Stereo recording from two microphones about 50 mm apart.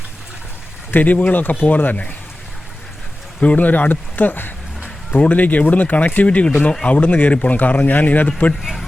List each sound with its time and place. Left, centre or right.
0.9 s speech: left
3.4 s speech: left
8.6 s a sound: centre